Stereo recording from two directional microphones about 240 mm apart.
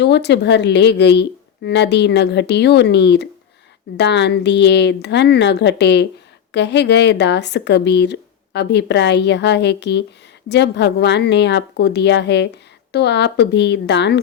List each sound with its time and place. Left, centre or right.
0.0 s speech: left